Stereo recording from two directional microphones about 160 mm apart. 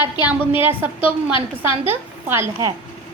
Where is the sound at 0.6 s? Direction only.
10° right (ahead or behind).